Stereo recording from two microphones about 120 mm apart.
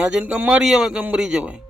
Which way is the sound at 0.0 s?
5° right (ahead or behind).